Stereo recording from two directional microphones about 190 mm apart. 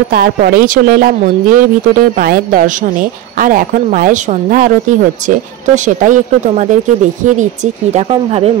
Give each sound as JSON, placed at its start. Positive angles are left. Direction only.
{"t": 0.1, "sound": "a woman's voice", "side_deg": -50}